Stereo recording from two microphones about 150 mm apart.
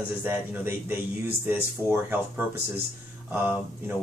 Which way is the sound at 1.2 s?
15° right (ahead or behind).